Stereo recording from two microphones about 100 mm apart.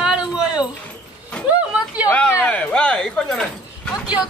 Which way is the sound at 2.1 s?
20° left (ahead or behind).